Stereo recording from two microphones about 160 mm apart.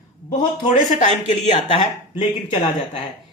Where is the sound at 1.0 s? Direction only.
50° left (ahead or behind).